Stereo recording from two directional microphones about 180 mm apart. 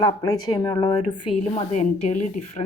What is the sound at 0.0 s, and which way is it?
Speech, 20° left (ahead or behind).